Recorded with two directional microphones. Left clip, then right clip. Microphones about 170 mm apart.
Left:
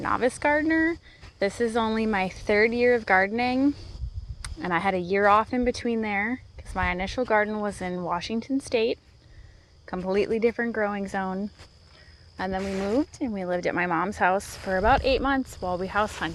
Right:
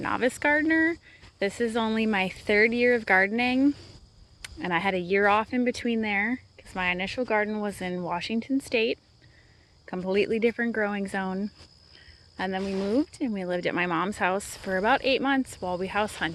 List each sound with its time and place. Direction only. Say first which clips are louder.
0.0 s speech: left 2 dB; 35° right (ahead or behind)